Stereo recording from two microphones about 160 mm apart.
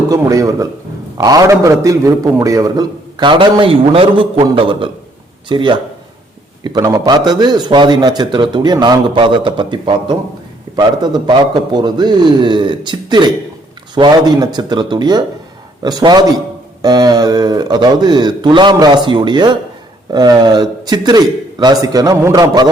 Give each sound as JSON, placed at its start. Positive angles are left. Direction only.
{"t": 0.1, "sound": "a man's voice", "side_deg": -20}